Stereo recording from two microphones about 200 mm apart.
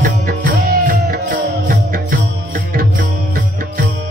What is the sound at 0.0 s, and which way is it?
Music, 45° right (ahead or behind).